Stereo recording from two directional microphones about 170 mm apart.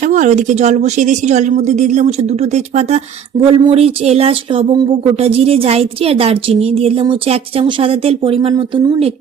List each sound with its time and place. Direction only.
0.0 s speech: 45° right (ahead or behind)